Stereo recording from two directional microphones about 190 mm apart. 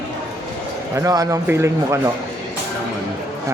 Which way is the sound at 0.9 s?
15° right (ahead or behind).